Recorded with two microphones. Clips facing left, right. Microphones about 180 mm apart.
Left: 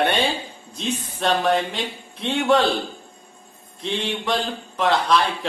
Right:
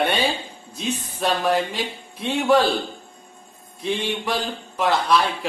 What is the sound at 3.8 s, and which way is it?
Speech, 5° right (ahead or behind).